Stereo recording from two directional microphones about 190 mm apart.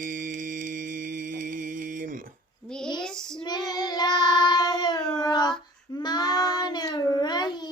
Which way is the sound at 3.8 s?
20° left (ahead or behind).